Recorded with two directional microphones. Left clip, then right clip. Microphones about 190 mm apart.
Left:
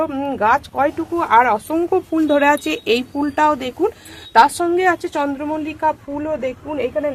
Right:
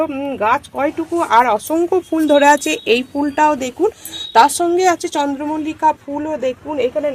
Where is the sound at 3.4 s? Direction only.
35° right (ahead or behind).